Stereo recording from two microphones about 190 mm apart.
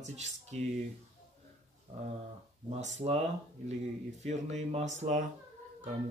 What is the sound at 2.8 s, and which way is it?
Speech, 35° right (ahead or behind).